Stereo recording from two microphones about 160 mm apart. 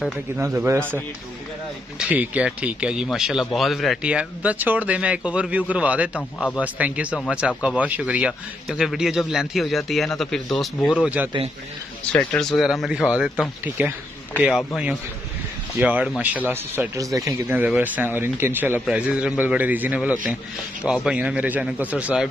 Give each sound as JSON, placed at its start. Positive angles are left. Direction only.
{"t": 0.4, "sound": "speech", "side_deg": -15}
{"t": 2.0, "sound": "a man's voice", "side_deg": -5}
{"t": 11.0, "sound": "speech", "side_deg": -10}
{"t": 12.1, "sound": "a man's voice", "side_deg": 5}
{"t": 15.8, "sound": "speech", "side_deg": -10}